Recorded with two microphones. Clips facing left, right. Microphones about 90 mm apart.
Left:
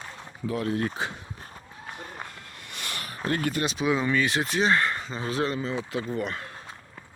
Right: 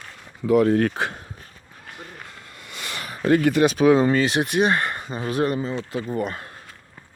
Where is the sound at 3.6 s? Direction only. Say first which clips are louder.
Right 9 dB; 50° right (ahead or behind).